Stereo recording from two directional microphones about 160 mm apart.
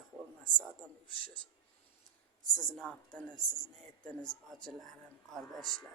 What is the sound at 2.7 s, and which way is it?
Speech, 5° left (ahead or behind).